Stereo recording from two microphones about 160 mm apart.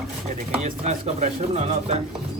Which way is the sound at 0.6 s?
45° right (ahead or behind).